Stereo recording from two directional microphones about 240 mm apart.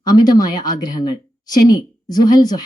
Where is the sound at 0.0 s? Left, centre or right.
Centre.